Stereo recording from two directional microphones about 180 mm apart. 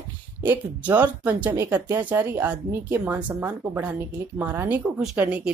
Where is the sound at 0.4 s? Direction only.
10° right (ahead or behind).